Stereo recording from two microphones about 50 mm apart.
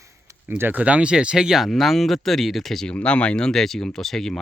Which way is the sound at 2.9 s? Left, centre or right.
Left.